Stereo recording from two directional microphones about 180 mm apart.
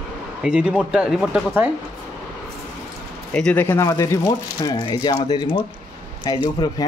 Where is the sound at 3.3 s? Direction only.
10° left (ahead or behind); by 5.5 s 25° left (ahead or behind).